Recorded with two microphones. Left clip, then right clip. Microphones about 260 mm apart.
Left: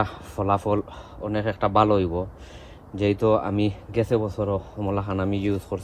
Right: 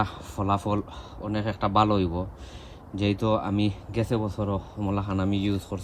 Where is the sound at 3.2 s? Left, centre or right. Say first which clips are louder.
Left 5 dB; centre.